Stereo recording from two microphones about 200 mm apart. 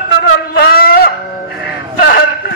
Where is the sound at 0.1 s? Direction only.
50° left (ahead or behind).